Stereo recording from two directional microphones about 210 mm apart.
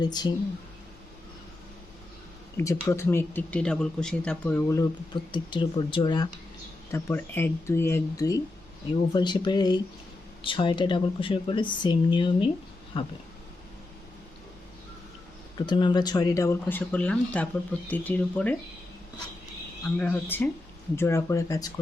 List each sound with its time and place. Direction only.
0.0 s speech: 20° left (ahead or behind)
2.6 s speech: 15° left (ahead or behind)
5.3 s speech: 20° left (ahead or behind)
6.9 s speech: 10° left (ahead or behind)
15.5 s speech: 20° left (ahead or behind)
20.0 s speech: 10° left (ahead or behind)